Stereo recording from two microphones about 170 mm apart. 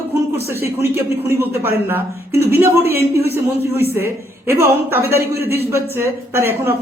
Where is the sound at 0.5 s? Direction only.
15° right (ahead or behind).